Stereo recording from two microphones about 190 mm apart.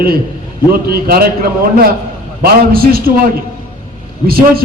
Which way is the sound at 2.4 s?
50° right (ahead or behind).